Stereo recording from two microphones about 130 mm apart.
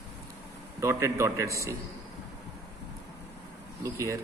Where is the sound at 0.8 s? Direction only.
25° right (ahead or behind).